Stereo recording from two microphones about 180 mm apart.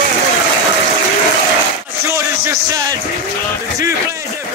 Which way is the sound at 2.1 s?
15° right (ahead or behind).